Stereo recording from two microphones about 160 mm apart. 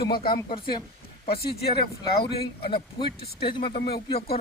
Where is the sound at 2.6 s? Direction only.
30° left (ahead or behind).